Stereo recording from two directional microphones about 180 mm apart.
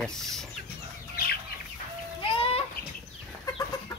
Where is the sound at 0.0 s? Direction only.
5° left (ahead or behind).